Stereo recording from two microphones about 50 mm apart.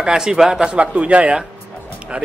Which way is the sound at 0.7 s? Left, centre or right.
Right.